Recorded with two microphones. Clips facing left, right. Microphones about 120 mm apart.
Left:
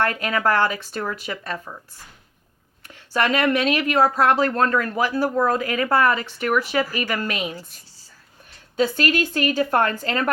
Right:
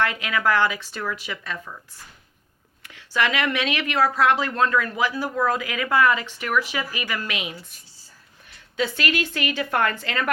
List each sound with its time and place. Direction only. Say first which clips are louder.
0.0 s speech: left 2 dB; 45° left (ahead or behind)
2.8 s speech: left 2 dB; 45° left (ahead or behind)
8.7 s speech: left 4 dB; 40° left (ahead or behind)